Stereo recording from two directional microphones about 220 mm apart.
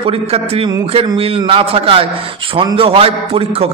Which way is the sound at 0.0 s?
25° right (ahead or behind).